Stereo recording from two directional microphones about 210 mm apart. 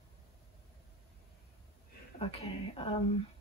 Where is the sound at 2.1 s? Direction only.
30° left (ahead or behind).